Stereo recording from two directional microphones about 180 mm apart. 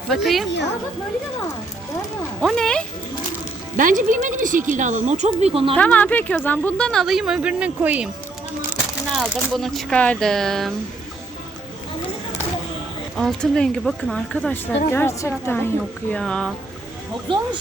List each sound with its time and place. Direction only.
0.1 s speech: centre (ahead or behind)
2.4 s speech: centre (ahead or behind)
3.8 s a woman's voice: 50° right (ahead or behind)
5.7 s speech: 10° left (ahead or behind)
13.1 s a woman's voice: centre (ahead or behind)